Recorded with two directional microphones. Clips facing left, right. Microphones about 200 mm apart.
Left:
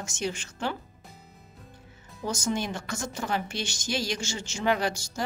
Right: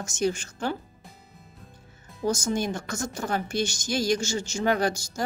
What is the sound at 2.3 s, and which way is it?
A woman's voice, 40° right (ahead or behind).